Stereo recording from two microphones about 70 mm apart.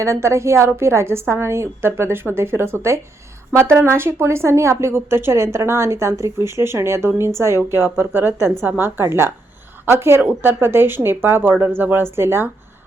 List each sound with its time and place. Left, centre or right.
0.0 s a woman's voice: right